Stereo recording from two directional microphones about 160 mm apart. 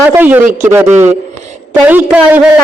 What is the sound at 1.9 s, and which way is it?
Speech, 10° right (ahead or behind).